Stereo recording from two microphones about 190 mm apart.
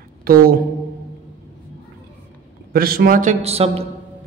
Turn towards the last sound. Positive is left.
turn(degrees=-35)  # may be behind; listen again after turning